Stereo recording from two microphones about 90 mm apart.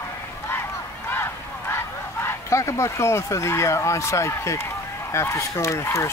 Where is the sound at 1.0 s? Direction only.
25° left (ahead or behind).